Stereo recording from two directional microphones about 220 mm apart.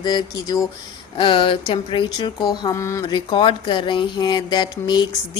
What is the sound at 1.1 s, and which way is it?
Music, 25° left (ahead or behind).